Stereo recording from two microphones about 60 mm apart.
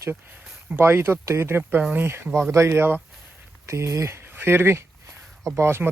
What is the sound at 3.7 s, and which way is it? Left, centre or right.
Speech, right.